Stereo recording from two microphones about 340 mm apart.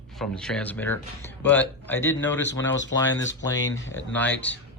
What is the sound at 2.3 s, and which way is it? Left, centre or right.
Speech, left.